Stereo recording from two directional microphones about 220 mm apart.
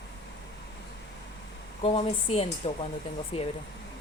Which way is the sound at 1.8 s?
25° left (ahead or behind).